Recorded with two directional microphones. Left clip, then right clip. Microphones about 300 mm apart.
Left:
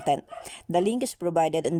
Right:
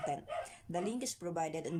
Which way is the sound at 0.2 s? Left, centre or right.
Left.